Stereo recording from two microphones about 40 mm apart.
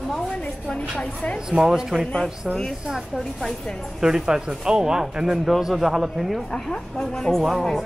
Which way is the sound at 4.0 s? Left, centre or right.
Centre.